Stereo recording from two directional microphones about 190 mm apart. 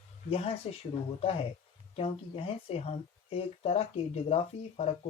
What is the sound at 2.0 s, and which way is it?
Speech, 30° left (ahead or behind).